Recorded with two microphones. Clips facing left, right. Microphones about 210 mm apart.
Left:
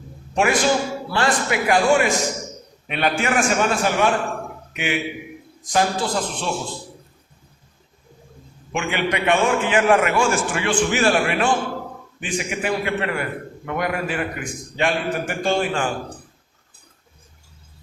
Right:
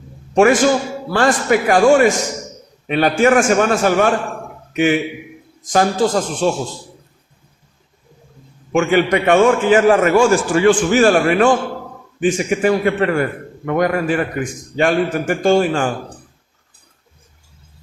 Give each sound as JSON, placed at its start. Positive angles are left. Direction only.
{"t": 0.3, "sound": "a man's voice", "side_deg": -45}
{"t": 8.7, "sound": "a man's voice", "side_deg": -45}